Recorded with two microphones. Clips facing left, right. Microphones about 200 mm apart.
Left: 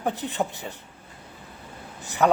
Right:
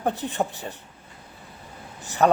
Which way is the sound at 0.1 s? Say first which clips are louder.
Even; 15° left (ahead or behind).